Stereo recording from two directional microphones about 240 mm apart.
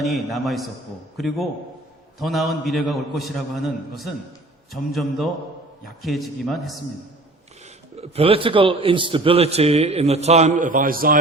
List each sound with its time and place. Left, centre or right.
0.0 s a man's voice: centre
7.9 s a man's voice: right